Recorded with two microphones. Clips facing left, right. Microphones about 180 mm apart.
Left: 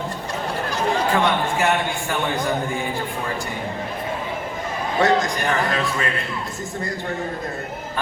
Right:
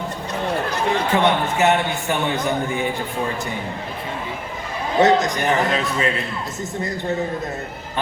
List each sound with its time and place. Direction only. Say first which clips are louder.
1.1 s a man's voice: right 2 dB; 20° right (ahead or behind)
4.9 s a man's voice: right 3 dB; 20° right (ahead or behind)